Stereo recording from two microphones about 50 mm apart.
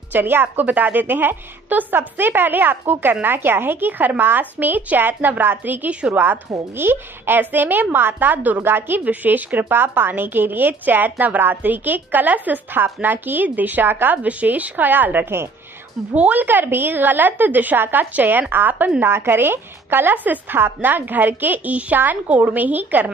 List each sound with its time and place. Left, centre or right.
0.1 s a woman's voice: right
9.0 s a woman's voice: right
14.2 s a woman's voice: right